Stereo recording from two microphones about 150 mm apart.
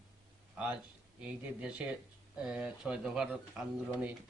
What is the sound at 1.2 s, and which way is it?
Speech, 5° right (ahead or behind).